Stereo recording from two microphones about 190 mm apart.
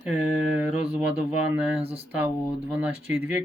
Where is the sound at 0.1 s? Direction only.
5° right (ahead or behind).